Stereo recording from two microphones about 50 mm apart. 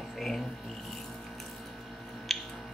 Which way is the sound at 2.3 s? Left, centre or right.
Centre.